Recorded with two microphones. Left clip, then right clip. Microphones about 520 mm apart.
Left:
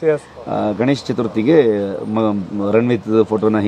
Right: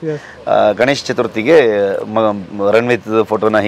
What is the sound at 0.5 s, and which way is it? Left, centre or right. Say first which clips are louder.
Speech: right 7 dB; right.